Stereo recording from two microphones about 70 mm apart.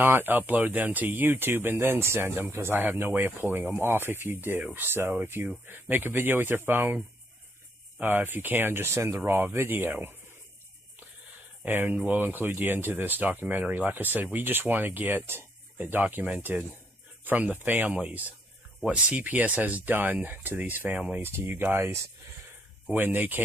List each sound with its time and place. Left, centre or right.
0.0 s speech: right
8.0 s speech: right
11.6 s speech: right
22.8 s speech: right